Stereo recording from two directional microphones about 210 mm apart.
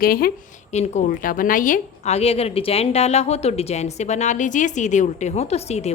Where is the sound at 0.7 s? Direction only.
35° left (ahead or behind).